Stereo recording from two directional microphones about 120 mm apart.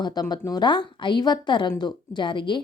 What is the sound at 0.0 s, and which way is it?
A woman's voice, 35° left (ahead or behind).